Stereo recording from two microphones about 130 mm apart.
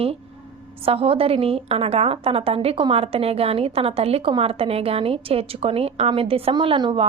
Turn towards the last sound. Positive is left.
turn(degrees=-40)  # may be behind; listen again after turning